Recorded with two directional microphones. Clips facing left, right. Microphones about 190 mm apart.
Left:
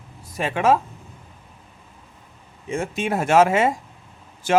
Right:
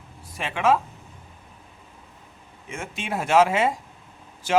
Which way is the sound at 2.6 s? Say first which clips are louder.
Left 8 dB; 35° left (ahead or behind).